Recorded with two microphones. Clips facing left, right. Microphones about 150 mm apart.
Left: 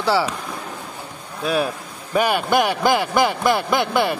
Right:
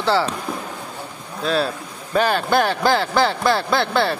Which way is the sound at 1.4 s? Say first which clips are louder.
Even; 15° left (ahead or behind).